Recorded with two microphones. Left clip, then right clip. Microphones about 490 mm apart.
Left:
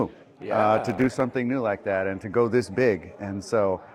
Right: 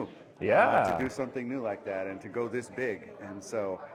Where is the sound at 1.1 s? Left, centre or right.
Left.